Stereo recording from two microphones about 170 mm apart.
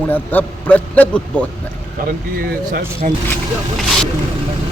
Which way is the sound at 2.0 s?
55° right (ahead or behind).